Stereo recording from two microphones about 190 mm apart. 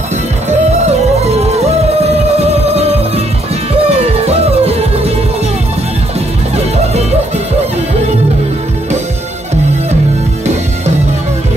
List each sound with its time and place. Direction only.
0.8 s music: 35° right (ahead or behind)
3.9 s music: 35° right (ahead or behind)